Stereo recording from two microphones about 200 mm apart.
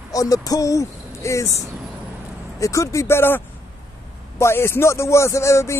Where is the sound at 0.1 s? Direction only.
15° left (ahead or behind).